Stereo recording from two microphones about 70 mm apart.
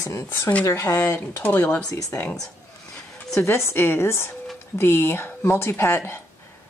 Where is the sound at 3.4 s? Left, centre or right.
Left.